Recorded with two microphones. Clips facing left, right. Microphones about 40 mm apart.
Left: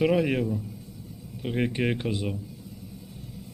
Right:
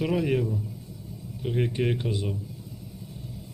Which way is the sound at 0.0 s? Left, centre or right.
Left.